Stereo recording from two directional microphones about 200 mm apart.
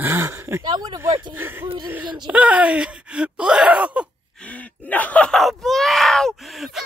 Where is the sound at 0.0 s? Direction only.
10° right (ahead or behind).